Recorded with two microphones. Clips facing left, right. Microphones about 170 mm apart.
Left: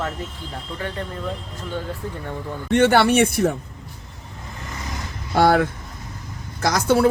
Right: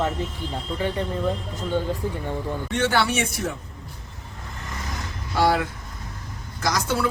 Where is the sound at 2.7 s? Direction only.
60° left (ahead or behind).